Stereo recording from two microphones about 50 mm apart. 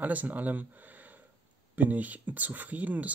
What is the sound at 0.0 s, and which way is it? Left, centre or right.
Speech, right.